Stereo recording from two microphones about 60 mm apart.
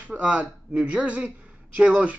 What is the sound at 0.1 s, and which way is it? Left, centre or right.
Speech, right.